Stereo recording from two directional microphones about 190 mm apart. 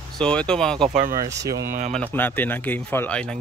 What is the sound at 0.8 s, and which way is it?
Speech, 40° right (ahead or behind).